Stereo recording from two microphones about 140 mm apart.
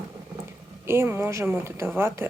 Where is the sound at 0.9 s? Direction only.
15° right (ahead or behind).